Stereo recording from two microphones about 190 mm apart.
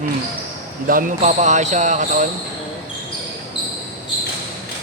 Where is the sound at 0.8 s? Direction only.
45° right (ahead or behind).